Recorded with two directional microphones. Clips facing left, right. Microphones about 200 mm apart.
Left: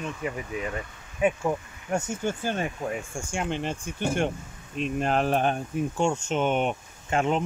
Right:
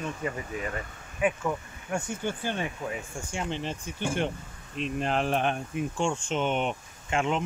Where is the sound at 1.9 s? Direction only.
40° left (ahead or behind).